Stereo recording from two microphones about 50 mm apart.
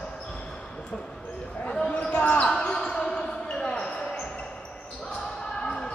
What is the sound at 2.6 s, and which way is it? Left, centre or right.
Basketball bounce, centre.